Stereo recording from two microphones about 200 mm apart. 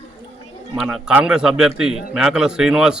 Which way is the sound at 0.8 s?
Centre (ahead or behind).